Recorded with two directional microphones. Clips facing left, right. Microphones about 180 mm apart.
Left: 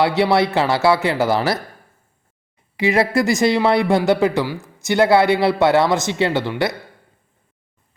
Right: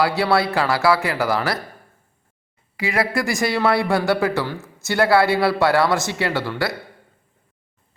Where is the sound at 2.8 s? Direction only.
25° left (ahead or behind).